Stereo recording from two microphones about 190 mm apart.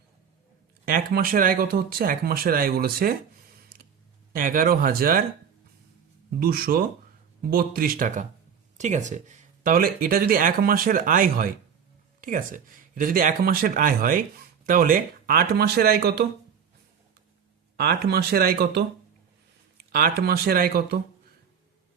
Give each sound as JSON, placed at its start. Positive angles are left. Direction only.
{"t": 0.9, "sound": "speech", "side_deg": -50}
{"t": 4.3, "sound": "speech", "side_deg": -45}
{"t": 6.4, "sound": "speech", "side_deg": -55}
{"t": 17.7, "sound": "speech", "side_deg": -55}